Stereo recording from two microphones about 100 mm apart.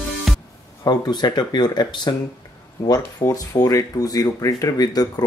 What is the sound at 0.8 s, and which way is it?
Speech, 45° left (ahead or behind).